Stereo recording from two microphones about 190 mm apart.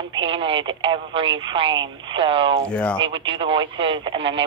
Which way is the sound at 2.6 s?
5° left (ahead or behind).